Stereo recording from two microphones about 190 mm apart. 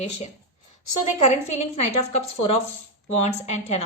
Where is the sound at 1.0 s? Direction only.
35° left (ahead or behind).